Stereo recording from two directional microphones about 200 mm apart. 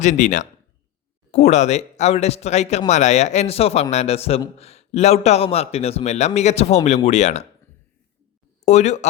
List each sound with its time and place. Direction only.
0.0 s speech: 35° left (ahead or behind)
8.6 s speech: 35° left (ahead or behind)